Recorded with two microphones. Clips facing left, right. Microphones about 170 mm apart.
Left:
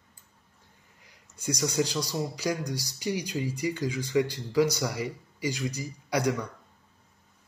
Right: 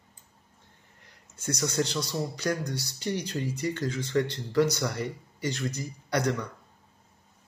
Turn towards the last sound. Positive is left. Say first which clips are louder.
# left 1 dB
turn(degrees=10)  # may be behind; listen again after turning